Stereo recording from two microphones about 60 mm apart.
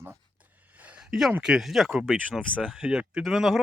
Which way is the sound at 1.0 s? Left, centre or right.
Centre.